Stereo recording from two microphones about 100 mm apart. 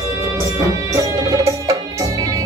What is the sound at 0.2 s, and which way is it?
Music, 35° right (ahead or behind).